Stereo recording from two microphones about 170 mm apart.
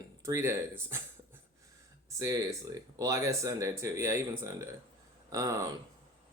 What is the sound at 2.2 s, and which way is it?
Speech, 20° right (ahead or behind).